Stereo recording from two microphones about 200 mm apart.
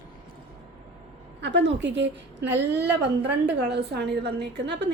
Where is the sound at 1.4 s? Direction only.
60° right (ahead or behind).